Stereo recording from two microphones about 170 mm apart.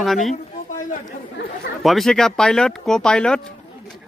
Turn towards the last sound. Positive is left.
turn(degrees=5)  # may be behind; listen again after turning